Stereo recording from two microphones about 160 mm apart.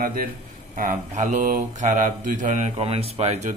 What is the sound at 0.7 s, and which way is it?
A man's voice, 55° right (ahead or behind).